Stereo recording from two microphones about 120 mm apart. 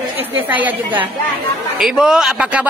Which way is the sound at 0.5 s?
10° right (ahead or behind).